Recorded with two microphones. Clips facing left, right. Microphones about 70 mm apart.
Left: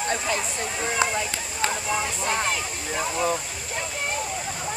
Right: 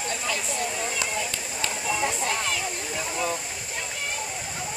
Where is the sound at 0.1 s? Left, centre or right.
Left.